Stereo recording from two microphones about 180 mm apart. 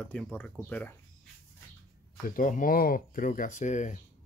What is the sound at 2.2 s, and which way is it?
Speech, 50° left (ahead or behind).